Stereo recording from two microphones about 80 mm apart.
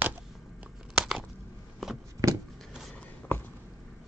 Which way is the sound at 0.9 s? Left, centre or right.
Centre.